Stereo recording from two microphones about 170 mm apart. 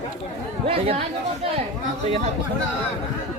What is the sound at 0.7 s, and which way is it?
Speech, 35° right (ahead or behind).